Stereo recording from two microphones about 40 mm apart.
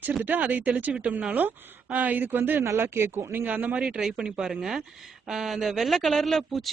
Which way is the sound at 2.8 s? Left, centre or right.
Right.